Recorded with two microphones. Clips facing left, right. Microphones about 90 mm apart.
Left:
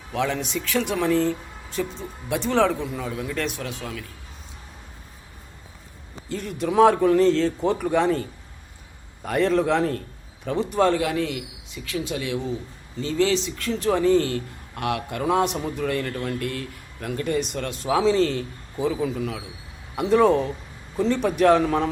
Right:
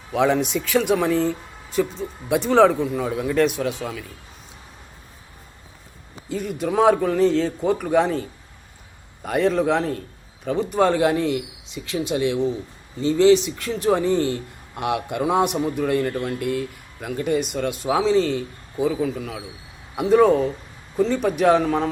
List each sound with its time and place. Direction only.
0.1 s a man's voice: 15° right (ahead or behind)
6.2 s a man's voice: 5° right (ahead or behind)
10.9 s a man's voice: 30° right (ahead or behind); by 21.8 s centre (ahead or behind)